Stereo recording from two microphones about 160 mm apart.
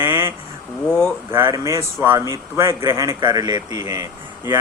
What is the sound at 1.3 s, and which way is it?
Speech, 15° right (ahead or behind).